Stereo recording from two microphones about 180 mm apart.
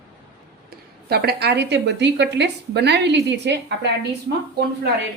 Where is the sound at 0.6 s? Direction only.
60° right (ahead or behind).